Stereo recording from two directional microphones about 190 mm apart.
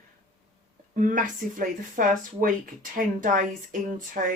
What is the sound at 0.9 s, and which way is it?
Speech, 45° right (ahead or behind).